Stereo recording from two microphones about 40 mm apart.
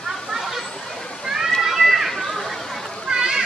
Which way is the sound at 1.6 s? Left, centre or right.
Centre.